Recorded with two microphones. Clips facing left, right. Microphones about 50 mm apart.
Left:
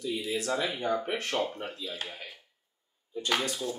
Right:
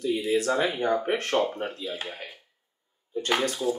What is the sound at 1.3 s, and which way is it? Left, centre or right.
Speech, right.